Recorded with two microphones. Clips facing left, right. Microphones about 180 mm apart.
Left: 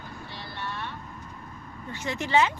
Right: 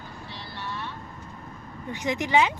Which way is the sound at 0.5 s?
55° left (ahead or behind).